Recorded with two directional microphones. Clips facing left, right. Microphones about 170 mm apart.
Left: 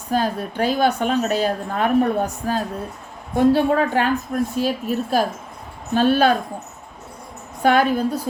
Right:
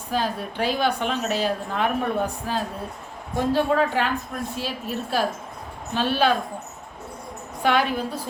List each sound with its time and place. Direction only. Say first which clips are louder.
0.1 s a woman's voice: left 4 dB; 45° left (ahead or behind)
7.6 s a woman's voice: left 5 dB; 45° left (ahead or behind)